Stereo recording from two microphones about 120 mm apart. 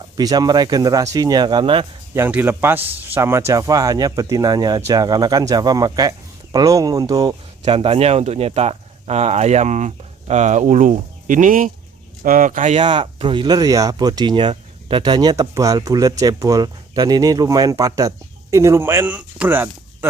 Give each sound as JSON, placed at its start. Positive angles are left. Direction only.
{"t": 0.2, "sound": "speech", "side_deg": -35}
{"t": 2.1, "sound": "speech", "side_deg": -20}
{"t": 7.7, "sound": "speech", "side_deg": -50}
{"t": 12.7, "sound": "speech", "side_deg": -45}